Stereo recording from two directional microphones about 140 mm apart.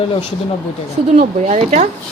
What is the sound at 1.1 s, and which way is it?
Speech, 55° right (ahead or behind).